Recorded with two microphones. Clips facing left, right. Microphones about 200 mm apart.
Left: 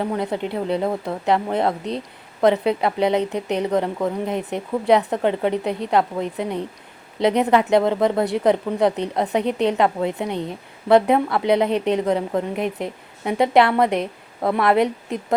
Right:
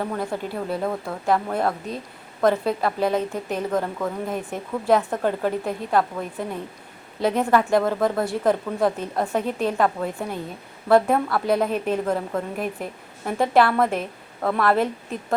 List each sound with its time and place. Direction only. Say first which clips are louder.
0.0 s a woman's voice: left 3 dB; 20° left (ahead or behind)